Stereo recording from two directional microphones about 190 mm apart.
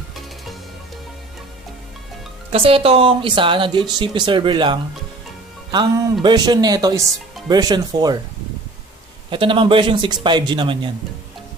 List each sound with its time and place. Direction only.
2.5 s speech: 30° right (ahead or behind)
6.2 s speech: 20° right (ahead or behind)
9.3 s speech: 25° right (ahead or behind)